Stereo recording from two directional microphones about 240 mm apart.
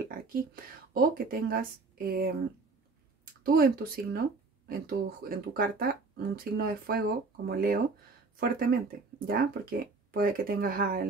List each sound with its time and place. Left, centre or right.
0.9 s speech: right
3.4 s speech: right